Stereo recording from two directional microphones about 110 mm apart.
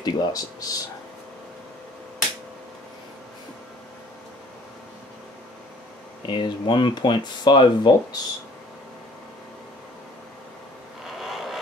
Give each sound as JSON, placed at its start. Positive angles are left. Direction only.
{"t": 0.0, "sound": "speech", "side_deg": 35}
{"t": 6.2, "sound": "speech", "side_deg": 45}
{"t": 11.1, "sound": "a sound", "side_deg": 0}